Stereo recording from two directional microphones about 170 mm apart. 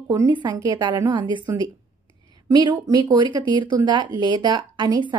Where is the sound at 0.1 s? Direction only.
20° right (ahead or behind).